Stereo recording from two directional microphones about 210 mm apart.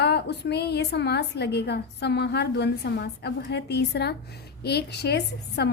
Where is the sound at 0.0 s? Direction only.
50° left (ahead or behind).